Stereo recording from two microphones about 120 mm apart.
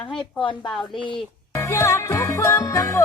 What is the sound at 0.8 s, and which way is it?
Speech, 40° left (ahead or behind).